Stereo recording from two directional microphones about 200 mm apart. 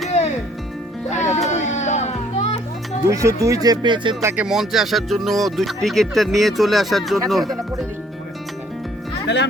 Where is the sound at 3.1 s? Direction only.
15° right (ahead or behind).